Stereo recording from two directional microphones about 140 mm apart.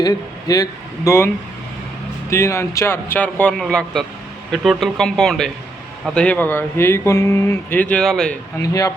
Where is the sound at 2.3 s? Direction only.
20° left (ahead or behind).